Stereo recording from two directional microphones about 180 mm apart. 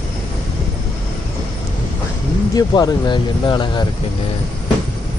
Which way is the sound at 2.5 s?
20° left (ahead or behind).